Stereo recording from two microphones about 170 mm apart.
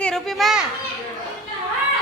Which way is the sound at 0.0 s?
Centre (ahead or behind).